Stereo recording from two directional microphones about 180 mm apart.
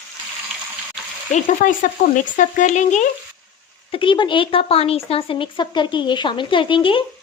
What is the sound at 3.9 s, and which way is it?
Speech, 30° left (ahead or behind).